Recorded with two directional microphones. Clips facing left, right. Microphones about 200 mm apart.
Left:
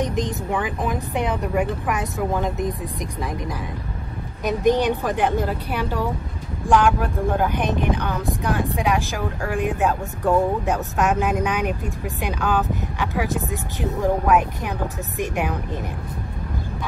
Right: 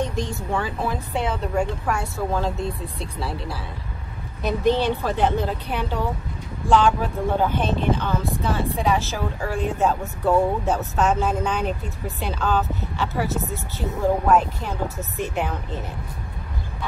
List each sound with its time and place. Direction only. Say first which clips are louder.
0.0 s speech: left 2 dB; 20° left (ahead or behind)
7.0 s speech: even; 10° left (ahead or behind)
14.2 s speech: even; centre (ahead or behind)
14.6 s speech: left 1 dB; 15° left (ahead or behind)